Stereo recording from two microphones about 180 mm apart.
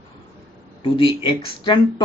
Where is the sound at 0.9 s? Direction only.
30° left (ahead or behind).